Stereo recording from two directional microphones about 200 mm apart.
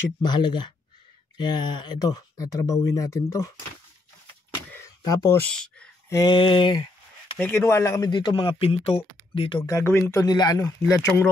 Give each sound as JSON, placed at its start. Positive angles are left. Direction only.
{"t": 0.2, "sound": "speech", "side_deg": 20}
{"t": 4.7, "sound": "a sound", "side_deg": 15}
{"t": 5.5, "sound": "speech", "side_deg": 5}
{"t": 6.0, "sound": "speech", "side_deg": 20}
{"t": 7.3, "sound": "speech", "side_deg": 10}
{"t": 9.6, "sound": "speech", "side_deg": 15}